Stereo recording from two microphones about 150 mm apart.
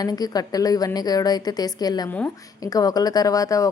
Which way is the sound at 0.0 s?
25° left (ahead or behind).